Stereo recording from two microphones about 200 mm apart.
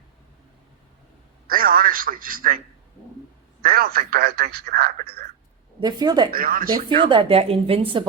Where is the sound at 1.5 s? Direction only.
45° right (ahead or behind).